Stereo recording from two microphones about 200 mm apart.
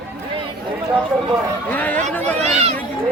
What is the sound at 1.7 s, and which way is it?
Speech, 10° left (ahead or behind).